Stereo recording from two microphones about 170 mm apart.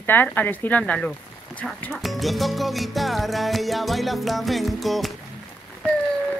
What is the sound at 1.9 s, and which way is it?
Music, centre (ahead or behind).